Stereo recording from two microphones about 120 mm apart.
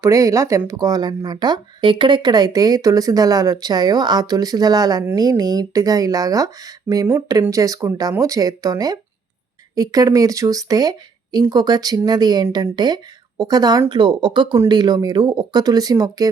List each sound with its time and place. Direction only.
0.0 s a woman's voice: 25° right (ahead or behind)